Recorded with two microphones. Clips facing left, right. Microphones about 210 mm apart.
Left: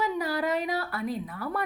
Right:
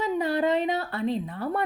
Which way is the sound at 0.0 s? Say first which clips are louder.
Right 4 dB; 25° right (ahead or behind).